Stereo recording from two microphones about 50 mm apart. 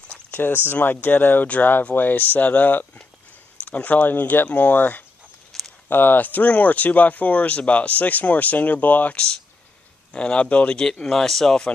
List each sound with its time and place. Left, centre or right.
0.3 s a sound: left
0.8 s speech: left
5.5 s a sound: centre
5.9 s speech: left
9.1 s speech: centre
10.8 s speech: centre